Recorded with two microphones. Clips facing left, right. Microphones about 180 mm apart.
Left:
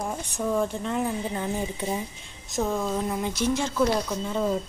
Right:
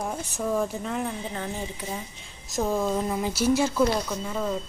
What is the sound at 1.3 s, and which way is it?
Speech, 20° left (ahead or behind).